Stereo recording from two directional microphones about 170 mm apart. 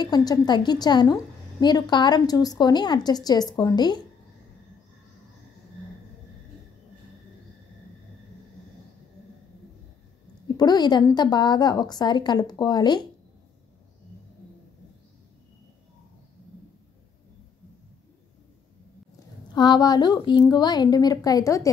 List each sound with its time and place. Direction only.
0.0 s a woman's voice: 25° left (ahead or behind)
10.6 s a woman's voice: 25° left (ahead or behind)
19.5 s a woman's voice: 25° left (ahead or behind)